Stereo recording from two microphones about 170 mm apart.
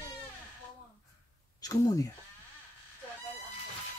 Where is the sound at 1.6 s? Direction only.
20° left (ahead or behind).